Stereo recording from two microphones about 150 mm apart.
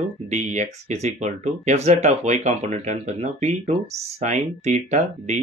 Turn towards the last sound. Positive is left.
turn(degrees=-45)  # may be behind; listen again after turning